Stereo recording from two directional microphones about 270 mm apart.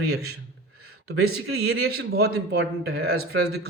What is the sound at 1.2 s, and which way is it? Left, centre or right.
Speech, right.